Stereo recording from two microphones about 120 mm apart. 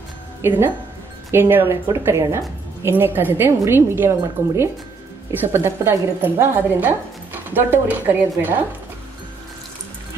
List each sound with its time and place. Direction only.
0.4 s a woman's voice: 20° right (ahead or behind)